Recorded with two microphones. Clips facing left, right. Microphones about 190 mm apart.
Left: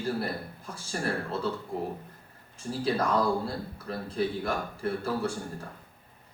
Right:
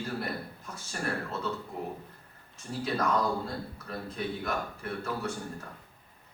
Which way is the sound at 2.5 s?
30° left (ahead or behind).